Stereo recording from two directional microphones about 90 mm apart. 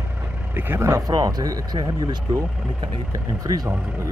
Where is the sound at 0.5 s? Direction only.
25° right (ahead or behind).